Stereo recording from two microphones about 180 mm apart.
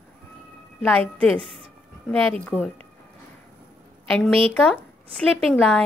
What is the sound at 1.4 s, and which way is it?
Speech, 30° right (ahead or behind).